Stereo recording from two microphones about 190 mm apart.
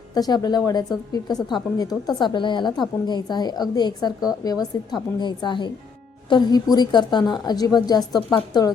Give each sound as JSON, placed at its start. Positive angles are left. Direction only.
{"t": 0.1, "sound": "a woman's voice", "side_deg": 20}